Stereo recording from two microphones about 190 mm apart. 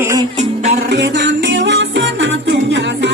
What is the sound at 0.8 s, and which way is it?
Music, 65° right (ahead or behind).